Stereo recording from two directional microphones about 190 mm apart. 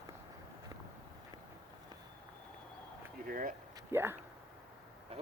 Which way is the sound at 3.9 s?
10° right (ahead or behind).